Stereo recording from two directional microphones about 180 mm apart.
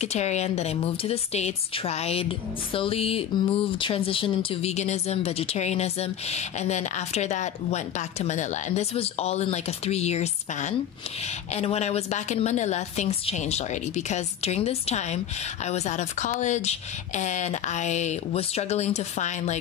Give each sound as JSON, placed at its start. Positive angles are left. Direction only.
{"t": 0.0, "sound": "speech", "side_deg": 40}